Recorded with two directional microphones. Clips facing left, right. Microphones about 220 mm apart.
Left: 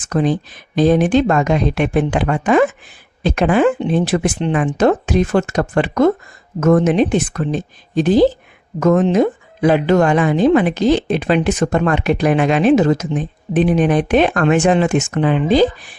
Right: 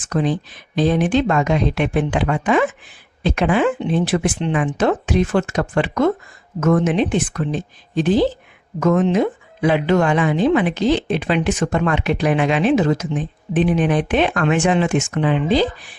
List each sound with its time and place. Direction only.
0.1 s a woman's voice: 40° left (ahead or behind)